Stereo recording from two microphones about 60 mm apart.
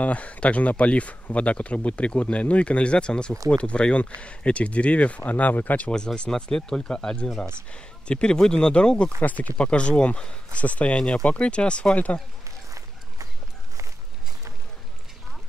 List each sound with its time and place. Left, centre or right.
0.0 s speech: left
5.9 s speech: centre
12.4 s walk: right